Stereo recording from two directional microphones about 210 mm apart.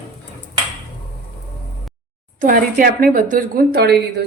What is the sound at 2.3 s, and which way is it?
Speech, 40° right (ahead or behind).